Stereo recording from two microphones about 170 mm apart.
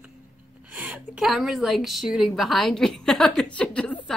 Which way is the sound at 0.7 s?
10° right (ahead or behind).